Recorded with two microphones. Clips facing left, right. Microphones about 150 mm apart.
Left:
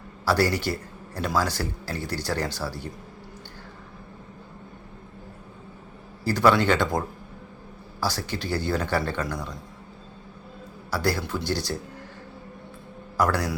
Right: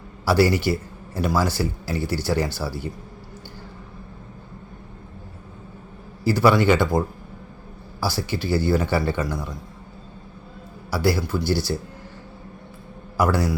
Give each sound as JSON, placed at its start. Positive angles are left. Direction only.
{"t": 0.3, "sound": "a man's voice", "side_deg": -10}
{"t": 6.2, "sound": "a man's voice", "side_deg": -10}
{"t": 8.0, "sound": "a man's voice", "side_deg": -10}
{"t": 10.9, "sound": "a man's voice", "side_deg": -10}
{"t": 13.1, "sound": "a man's voice", "side_deg": -10}